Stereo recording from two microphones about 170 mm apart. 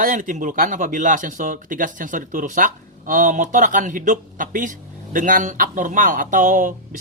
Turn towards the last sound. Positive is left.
turn(degrees=-50)  # may be behind; listen again after turning